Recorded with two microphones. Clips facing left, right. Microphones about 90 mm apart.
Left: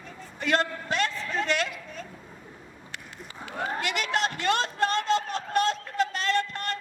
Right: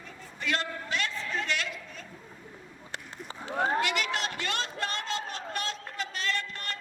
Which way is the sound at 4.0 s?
45° left (ahead or behind).